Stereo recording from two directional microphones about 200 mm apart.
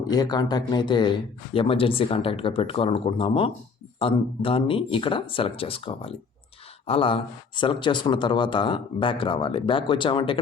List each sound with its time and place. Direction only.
0.1 s speech: 20° left (ahead or behind)